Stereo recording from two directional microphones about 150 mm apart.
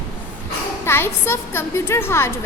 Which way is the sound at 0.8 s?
15° left (ahead or behind).